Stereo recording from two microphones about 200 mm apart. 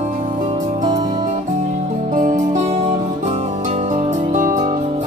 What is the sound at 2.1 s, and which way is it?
Music, 40° right (ahead or behind).